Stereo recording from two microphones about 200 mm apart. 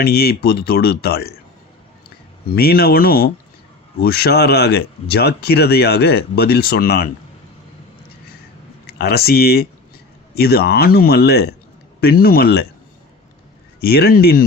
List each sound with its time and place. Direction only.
0.0 s speech: 50° left (ahead or behind)
8.9 s speech: 50° left (ahead or behind)
13.8 s speech: 50° left (ahead or behind)